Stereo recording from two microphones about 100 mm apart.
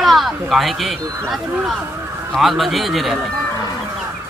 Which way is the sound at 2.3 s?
Centre (ahead or behind).